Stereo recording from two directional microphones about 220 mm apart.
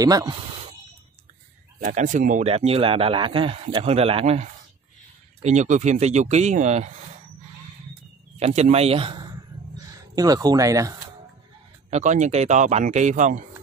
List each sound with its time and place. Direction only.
0.0 s speech: 15° right (ahead or behind)
1.8 s speech: 35° right (ahead or behind)
8.4 s speech: 30° right (ahead or behind)
11.9 s speech: 35° right (ahead or behind)